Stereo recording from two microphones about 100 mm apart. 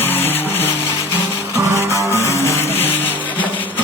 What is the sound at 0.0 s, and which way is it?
Music, 20° left (ahead or behind).